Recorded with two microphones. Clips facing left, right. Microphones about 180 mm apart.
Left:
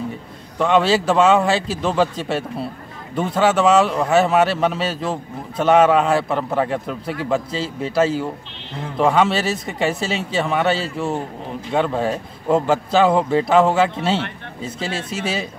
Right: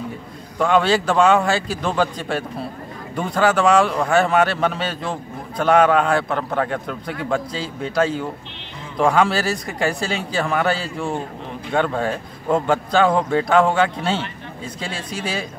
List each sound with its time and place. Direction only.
0.6 s a man's voice: centre (ahead or behind)